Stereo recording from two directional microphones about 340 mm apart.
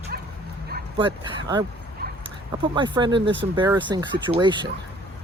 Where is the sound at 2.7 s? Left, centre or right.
Centre.